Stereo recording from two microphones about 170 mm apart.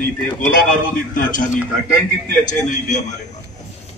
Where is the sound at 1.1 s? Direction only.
50° left (ahead or behind).